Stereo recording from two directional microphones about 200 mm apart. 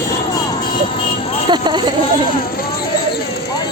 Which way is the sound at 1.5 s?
20° right (ahead or behind).